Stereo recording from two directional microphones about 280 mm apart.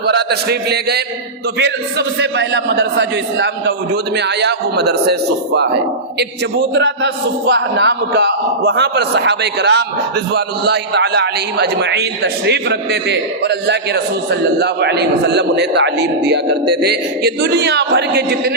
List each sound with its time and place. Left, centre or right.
0.0 s a man's voice: right
6.1 s a man's voice: right